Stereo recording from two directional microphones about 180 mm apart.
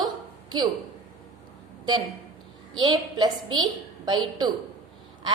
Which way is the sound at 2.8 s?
25° right (ahead or behind).